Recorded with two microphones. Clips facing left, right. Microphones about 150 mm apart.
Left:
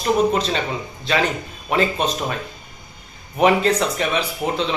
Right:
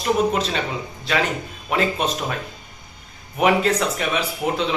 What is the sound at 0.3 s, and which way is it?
Speech, 5° right (ahead or behind).